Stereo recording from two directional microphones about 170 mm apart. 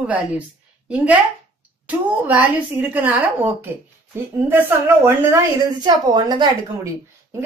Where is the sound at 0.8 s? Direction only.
10° right (ahead or behind).